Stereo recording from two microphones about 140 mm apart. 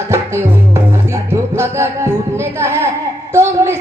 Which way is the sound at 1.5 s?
20° right (ahead or behind).